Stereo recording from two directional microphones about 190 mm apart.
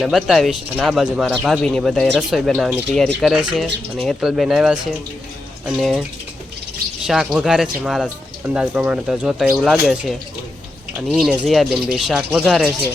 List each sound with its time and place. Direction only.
0.0 s speech: centre (ahead or behind)
7.1 s speech: centre (ahead or behind)